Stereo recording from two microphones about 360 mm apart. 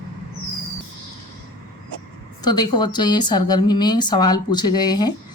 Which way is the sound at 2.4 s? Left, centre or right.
Centre.